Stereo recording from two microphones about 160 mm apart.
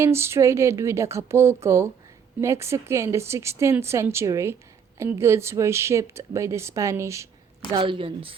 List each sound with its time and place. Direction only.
0.0 s speech: 15° right (ahead or behind)
7.7 s speech: 30° right (ahead or behind)